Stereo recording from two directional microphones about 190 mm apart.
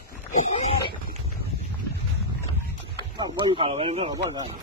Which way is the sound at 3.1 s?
25° right (ahead or behind).